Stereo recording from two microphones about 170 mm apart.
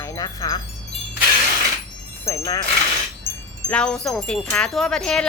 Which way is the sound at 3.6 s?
5° left (ahead or behind).